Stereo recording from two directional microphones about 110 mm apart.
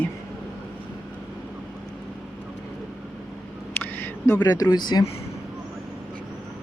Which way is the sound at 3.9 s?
20° left (ahead or behind).